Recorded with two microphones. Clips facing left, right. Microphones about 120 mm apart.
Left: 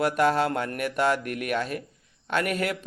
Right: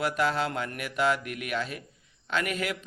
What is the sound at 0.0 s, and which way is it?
Speech, 50° left (ahead or behind).